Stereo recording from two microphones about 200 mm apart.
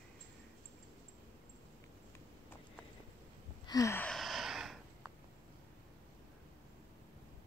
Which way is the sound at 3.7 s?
15° left (ahead or behind).